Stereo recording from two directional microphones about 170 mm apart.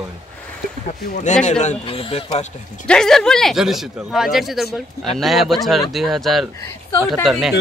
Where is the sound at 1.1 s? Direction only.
45° left (ahead or behind).